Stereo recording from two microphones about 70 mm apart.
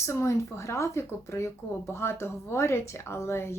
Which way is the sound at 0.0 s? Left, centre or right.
Left.